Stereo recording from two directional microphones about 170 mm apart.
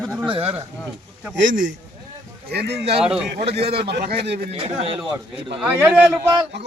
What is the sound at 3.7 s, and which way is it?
Speech, 75° right (ahead or behind).